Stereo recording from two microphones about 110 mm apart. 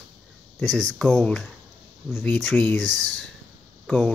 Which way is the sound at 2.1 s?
15° left (ahead or behind).